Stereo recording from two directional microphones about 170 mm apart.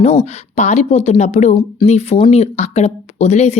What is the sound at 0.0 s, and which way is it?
Speech, 40° left (ahead or behind).